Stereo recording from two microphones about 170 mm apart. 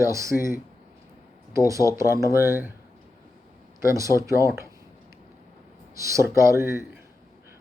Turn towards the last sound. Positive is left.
turn(degrees=-15)  # may be behind; listen again after turning